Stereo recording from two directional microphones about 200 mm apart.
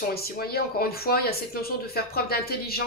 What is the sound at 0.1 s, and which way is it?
Speech, 50° left (ahead or behind).